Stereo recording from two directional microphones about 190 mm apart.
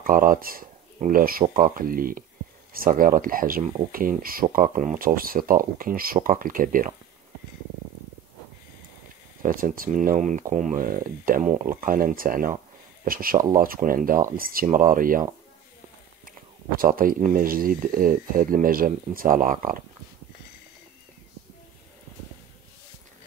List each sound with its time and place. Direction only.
0.0 s speech: 45° right (ahead or behind)
9.4 s speech: 45° right (ahead or behind)
16.7 s speech: 50° right (ahead or behind)